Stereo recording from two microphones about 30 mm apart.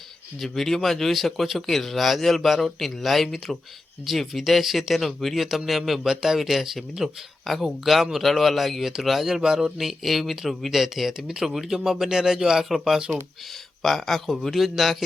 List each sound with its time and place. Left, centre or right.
0.3 s speech: centre
4.1 s speech: centre
6.0 s speech: centre
7.5 s speech: centre
7.9 s speech: centre
8.2 s speech: centre
9.2 s speech: centre
9.7 s speech: centre
13.8 s speech: centre